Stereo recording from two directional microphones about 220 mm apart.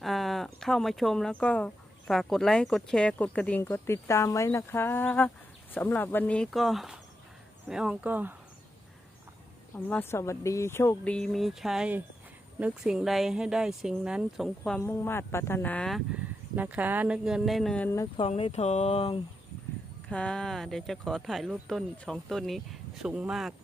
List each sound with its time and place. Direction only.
0.0 s speech: centre (ahead or behind)
9.7 s speech: 10° left (ahead or behind)
18.2 s speech: 25° left (ahead or behind)
20.1 s speech: 5° left (ahead or behind)